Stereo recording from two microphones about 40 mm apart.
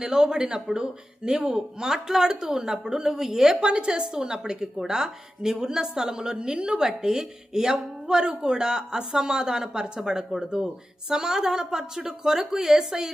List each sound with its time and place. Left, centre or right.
0.0 s a woman's voice: centre
3.6 s a woman's voice: right